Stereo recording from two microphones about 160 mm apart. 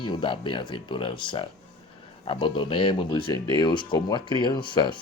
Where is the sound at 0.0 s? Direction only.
30° left (ahead or behind).